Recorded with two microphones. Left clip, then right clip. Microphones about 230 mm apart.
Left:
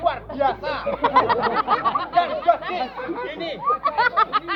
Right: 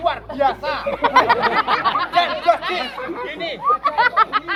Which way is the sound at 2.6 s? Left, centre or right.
Centre.